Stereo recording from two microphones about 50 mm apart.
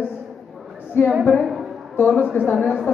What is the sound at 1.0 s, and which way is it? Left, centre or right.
Speech, left.